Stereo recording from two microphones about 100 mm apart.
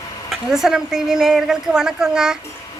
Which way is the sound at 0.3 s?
5° right (ahead or behind).